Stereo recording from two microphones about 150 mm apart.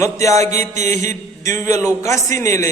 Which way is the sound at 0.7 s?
50° right (ahead or behind).